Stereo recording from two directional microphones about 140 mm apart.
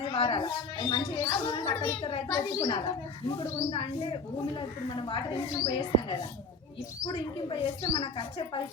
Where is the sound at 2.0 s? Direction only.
35° left (ahead or behind).